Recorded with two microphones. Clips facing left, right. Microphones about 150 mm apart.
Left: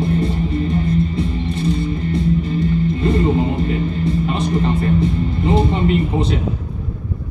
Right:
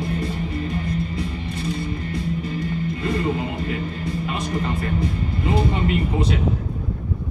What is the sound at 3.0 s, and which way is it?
Music, 30° left (ahead or behind).